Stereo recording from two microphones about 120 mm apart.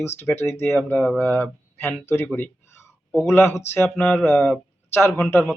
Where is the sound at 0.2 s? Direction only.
20° left (ahead or behind).